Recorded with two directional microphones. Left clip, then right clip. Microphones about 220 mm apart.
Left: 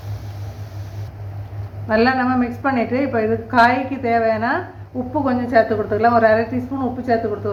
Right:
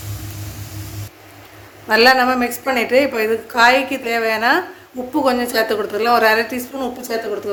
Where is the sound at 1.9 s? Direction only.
60° right (ahead or behind).